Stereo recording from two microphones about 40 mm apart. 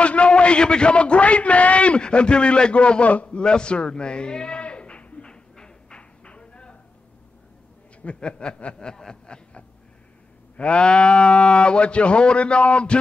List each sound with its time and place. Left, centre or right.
0.0 s a man's voice: left
8.0 s speech: left
8.8 s a sound: centre
10.6 s speech: left